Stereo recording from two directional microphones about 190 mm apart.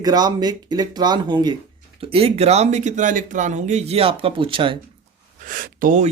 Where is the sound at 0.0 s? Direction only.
20° right (ahead or behind).